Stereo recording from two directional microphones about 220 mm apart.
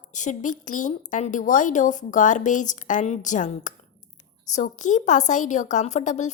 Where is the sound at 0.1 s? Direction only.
35° left (ahead or behind).